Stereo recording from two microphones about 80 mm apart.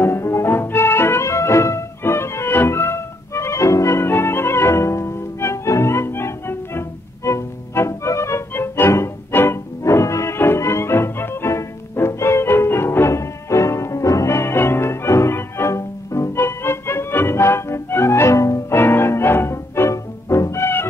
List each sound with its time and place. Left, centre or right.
0.0 s music: left
18.8 s music: left